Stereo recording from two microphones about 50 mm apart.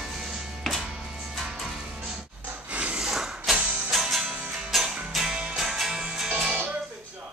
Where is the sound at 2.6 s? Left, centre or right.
Right.